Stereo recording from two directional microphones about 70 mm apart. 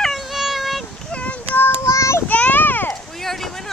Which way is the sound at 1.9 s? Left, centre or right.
Left.